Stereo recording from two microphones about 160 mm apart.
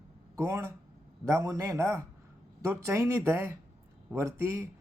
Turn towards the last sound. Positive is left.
turn(degrees=-15)  # may be behind; listen again after turning